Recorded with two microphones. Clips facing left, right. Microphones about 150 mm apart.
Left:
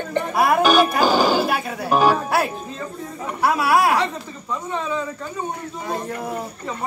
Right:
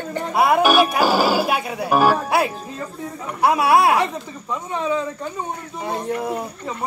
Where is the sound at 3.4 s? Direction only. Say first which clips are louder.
Right 2 dB; 20° right (ahead or behind).